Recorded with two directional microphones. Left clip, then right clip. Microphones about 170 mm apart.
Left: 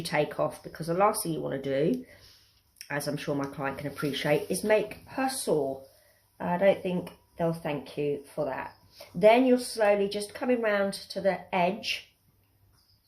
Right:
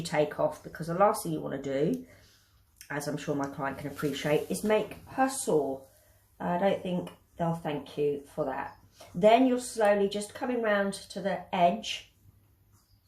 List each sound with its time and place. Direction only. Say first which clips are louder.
0.0 s speech: even; 45° left (ahead or behind)
6.3 s speech: left 4 dB; 45° left (ahead or behind)